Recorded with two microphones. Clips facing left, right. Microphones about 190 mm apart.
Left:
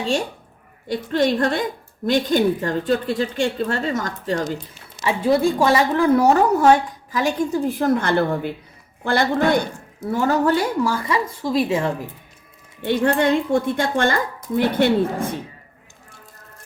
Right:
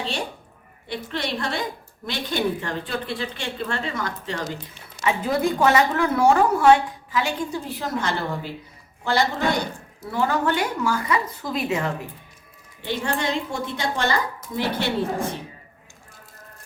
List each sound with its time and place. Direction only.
0.9 s a woman's voice: 45° left (ahead or behind)
5.0 s a woman's voice: 30° left (ahead or behind); by 9.6 s 55° left (ahead or behind)
10.1 s speech: 45° left (ahead or behind)
12.8 s a woman's voice: 55° left (ahead or behind)